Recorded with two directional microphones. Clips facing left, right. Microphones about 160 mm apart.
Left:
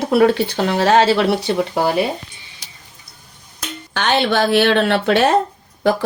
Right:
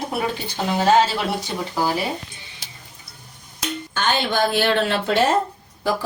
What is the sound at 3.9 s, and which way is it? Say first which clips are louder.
Speech: left 5 dB; 70° left (ahead or behind).